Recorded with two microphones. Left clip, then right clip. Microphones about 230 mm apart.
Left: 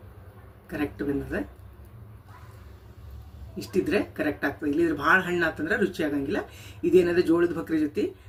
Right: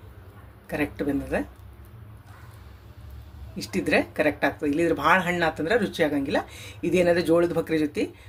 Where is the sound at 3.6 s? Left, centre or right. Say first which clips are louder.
Right 2 dB; right.